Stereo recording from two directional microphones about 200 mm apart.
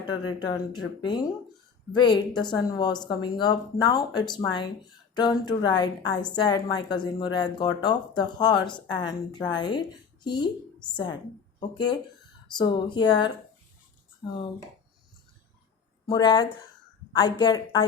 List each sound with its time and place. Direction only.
0.0 s a woman's voice: 20° left (ahead or behind)
12.5 s a woman's voice: 25° left (ahead or behind)
16.0 s a woman's voice: 20° left (ahead or behind)